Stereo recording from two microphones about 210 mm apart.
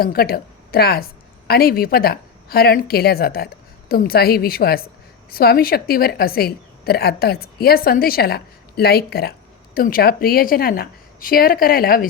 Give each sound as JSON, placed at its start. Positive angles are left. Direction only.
{"t": 0.0, "sound": "a woman's voice", "side_deg": 45}